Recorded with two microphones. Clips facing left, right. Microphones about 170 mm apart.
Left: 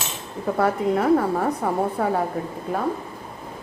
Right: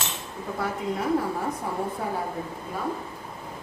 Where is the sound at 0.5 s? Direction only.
65° left (ahead or behind).